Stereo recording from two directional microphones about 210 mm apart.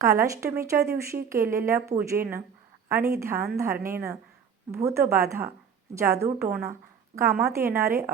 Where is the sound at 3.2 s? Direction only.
10° right (ahead or behind).